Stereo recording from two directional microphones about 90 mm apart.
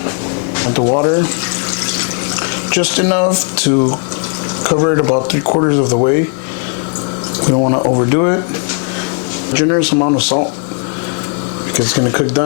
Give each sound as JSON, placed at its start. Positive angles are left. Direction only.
{"t": 0.8, "sound": "speech", "side_deg": 35}
{"t": 2.7, "sound": "speech", "side_deg": 20}
{"t": 4.7, "sound": "speech", "side_deg": 30}
{"t": 7.5, "sound": "speech", "side_deg": 35}
{"t": 9.6, "sound": "speech", "side_deg": 25}